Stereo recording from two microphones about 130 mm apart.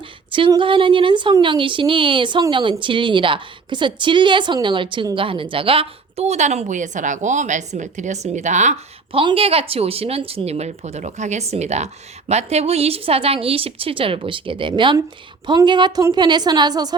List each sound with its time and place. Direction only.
0.3 s a woman's voice: 40° right (ahead or behind); by 8.8 s 65° right (ahead or behind)
9.1 s speech: 45° right (ahead or behind)